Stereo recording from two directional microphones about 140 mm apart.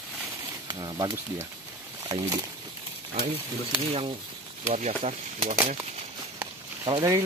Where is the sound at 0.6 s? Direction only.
30° right (ahead or behind).